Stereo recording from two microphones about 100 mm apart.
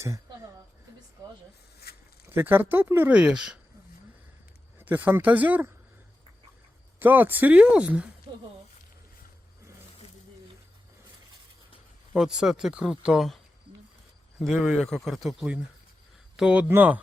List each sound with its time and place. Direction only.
2.3 s speech: 20° right (ahead or behind)
4.8 s speech: 20° right (ahead or behind)
7.0 s speech: 20° right (ahead or behind)
12.1 s speech: 5° right (ahead or behind)
16.4 s speech: 15° right (ahead or behind)